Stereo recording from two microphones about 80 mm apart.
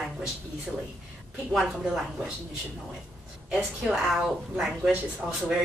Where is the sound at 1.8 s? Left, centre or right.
Centre.